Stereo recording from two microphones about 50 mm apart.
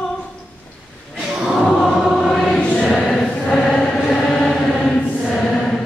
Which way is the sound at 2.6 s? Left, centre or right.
Centre.